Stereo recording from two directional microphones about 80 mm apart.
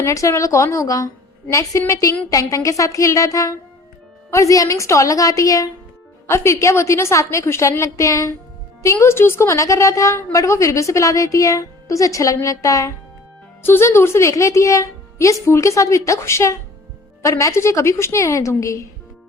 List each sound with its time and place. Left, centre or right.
0.0 s a woman's voice: left
13.7 s a woman's voice: left